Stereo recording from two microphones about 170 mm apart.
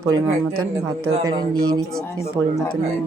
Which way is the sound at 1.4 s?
25° right (ahead or behind).